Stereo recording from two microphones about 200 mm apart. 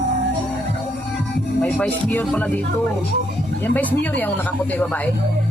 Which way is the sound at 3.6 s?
10° left (ahead or behind).